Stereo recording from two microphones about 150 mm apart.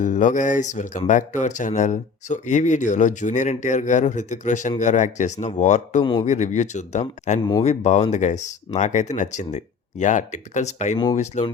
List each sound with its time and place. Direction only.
0.0 s speech: 60° left (ahead or behind)
6.0 s a man's voice: 30° left (ahead or behind)
6.2 s speech: 50° left (ahead or behind)
10.9 s speech: 30° left (ahead or behind)
11.2 s speech: 45° left (ahead or behind)